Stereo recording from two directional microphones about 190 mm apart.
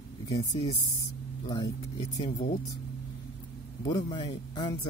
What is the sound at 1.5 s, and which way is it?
Speech, 20° left (ahead or behind).